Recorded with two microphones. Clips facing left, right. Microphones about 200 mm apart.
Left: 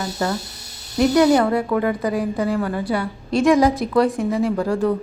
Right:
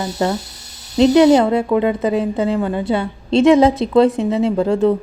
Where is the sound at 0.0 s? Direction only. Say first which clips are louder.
Right 4 dB; 20° right (ahead or behind).